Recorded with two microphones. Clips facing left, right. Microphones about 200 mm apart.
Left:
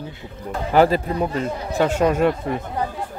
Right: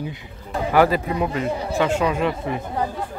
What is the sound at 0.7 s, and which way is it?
Speech, 30° left (ahead or behind).